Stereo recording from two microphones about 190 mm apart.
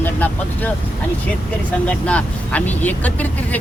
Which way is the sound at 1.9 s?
5° left (ahead or behind).